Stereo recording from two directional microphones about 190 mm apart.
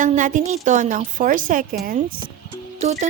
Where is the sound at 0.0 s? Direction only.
40° right (ahead or behind).